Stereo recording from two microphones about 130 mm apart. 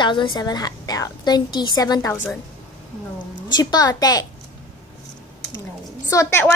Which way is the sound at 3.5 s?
30° left (ahead or behind).